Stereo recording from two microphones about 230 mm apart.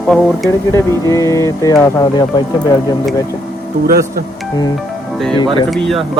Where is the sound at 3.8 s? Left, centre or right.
Right.